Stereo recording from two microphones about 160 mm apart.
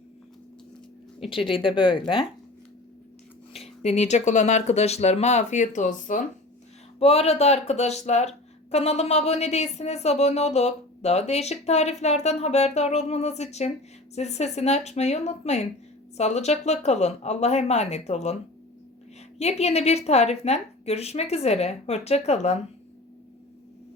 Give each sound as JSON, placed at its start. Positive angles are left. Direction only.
{"t": 1.3, "sound": "a woman's voice", "side_deg": 35}
{"t": 3.5, "sound": "speech", "side_deg": 40}
{"t": 7.0, "sound": "speech", "side_deg": 40}
{"t": 19.4, "sound": "a woman's voice", "side_deg": 40}